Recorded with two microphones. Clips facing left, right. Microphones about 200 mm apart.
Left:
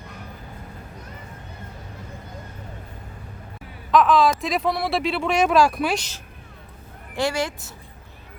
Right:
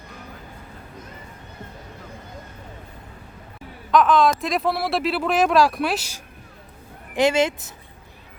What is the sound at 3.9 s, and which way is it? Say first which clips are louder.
Speech: even; centre (ahead or behind).